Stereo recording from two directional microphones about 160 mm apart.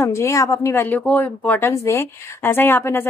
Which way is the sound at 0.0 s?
20° left (ahead or behind).